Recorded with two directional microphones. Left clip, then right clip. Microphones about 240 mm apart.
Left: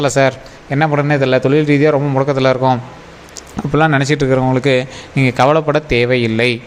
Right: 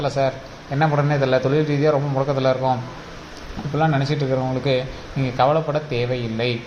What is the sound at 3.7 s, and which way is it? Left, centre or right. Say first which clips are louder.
Speech: left 8 dB; left.